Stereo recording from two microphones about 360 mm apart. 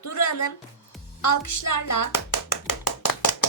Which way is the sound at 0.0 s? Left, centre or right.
Left.